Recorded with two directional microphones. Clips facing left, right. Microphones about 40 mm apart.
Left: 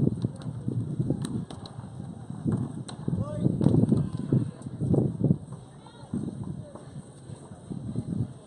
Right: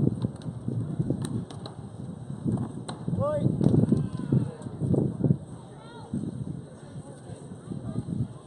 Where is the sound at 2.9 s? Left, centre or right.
Right.